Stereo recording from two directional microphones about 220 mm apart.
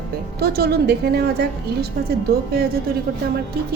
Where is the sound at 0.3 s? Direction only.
45° right (ahead or behind).